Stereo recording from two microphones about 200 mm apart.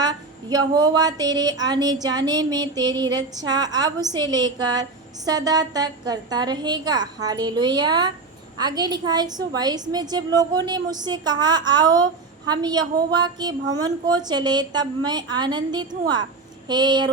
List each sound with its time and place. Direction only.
0.0 s a woman's voice: 20° right (ahead or behind)